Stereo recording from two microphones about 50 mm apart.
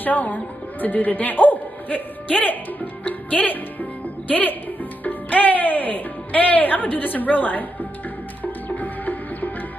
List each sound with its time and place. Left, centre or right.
0.0 s speech: left
3.0 s music: left
4.3 s speech: left
8.5 s music: left